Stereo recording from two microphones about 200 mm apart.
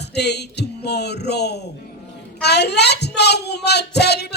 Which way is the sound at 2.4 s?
55° left (ahead or behind).